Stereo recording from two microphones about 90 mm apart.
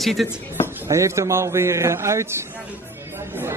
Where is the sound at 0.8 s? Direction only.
35° right (ahead or behind).